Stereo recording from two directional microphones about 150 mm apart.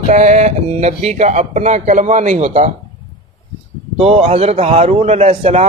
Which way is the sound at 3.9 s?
40° right (ahead or behind).